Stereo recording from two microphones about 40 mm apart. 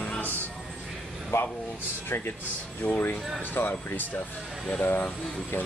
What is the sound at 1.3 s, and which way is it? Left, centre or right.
Speech, left.